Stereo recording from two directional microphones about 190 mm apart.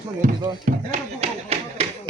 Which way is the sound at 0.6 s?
40° right (ahead or behind).